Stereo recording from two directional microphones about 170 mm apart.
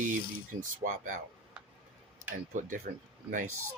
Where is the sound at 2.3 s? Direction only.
50° right (ahead or behind).